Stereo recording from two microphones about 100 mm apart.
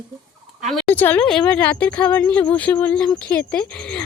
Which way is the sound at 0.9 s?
20° left (ahead or behind).